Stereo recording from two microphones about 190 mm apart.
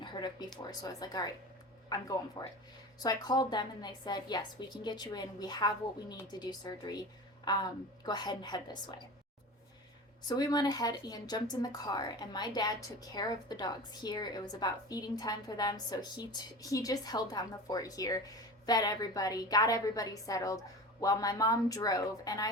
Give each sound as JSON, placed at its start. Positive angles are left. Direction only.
{"t": 0.0, "sound": "a sound", "side_deg": 25}
{"t": 0.7, "sound": "a woman's voice", "side_deg": 20}
{"t": 2.4, "sound": "a woman's voice", "side_deg": 25}
{"t": 10.2, "sound": "a woman's voice", "side_deg": 20}